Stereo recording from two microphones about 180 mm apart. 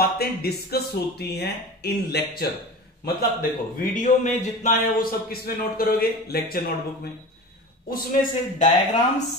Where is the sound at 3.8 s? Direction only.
45° left (ahead or behind).